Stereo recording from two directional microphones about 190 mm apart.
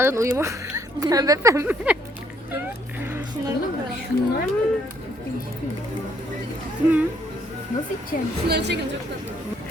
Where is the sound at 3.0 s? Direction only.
10° right (ahead or behind).